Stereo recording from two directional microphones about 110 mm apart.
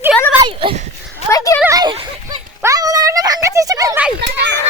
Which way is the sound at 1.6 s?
35° right (ahead or behind).